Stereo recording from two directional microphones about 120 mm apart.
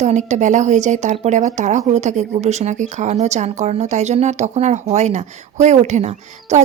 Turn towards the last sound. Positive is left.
turn(degrees=-70)  # may be behind; listen again after turning